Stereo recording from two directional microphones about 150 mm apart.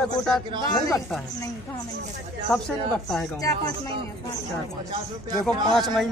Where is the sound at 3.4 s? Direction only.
25° left (ahead or behind).